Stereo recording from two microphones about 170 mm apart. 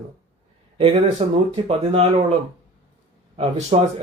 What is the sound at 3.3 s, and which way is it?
Speech, 35° right (ahead or behind).